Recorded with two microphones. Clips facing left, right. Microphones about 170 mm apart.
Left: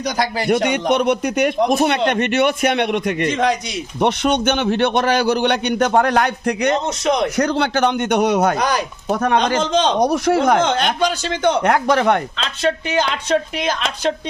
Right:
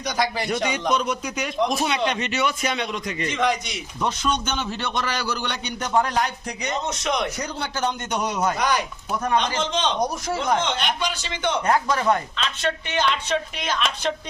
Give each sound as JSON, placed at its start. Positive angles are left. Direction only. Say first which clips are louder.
{"t": 0.4, "sound": "a man's voice", "louder": "left 7 dB", "side_deg": 60}
{"t": 3.2, "sound": "speech", "louder": "left 3 dB", "side_deg": 40}
{"t": 4.0, "sound": "a man's voice", "louder": "left 8 dB", "side_deg": 65}
{"t": 7.0, "sound": "speech", "louder": "left 7 dB", "side_deg": 35}
{"t": 7.3, "sound": "a man's voice", "louder": "left 11 dB", "side_deg": 75}
{"t": 8.5, "sound": "speech", "louder": "left 4 dB", "side_deg": 35}
{"t": 9.0, "sound": "a man's voice", "louder": "left 6 dB", "side_deg": 65}
{"t": 9.6, "sound": "speech", "louder": "left 7 dB", "side_deg": 40}
{"t": 10.0, "sound": "a man's voice", "louder": "left 9 dB", "side_deg": 70}
{"t": 10.6, "sound": "speech", "louder": "left 8 dB", "side_deg": 45}
{"t": 11.6, "sound": "a man's voice", "louder": "left 6 dB", "side_deg": 75}
{"t": 12.4, "sound": "speech", "louder": "left 6 dB", "side_deg": 35}